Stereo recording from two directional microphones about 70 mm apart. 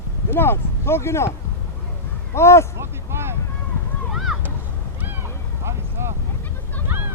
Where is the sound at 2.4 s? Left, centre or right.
Left.